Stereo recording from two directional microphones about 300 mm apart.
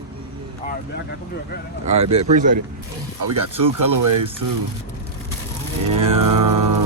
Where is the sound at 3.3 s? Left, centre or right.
Right.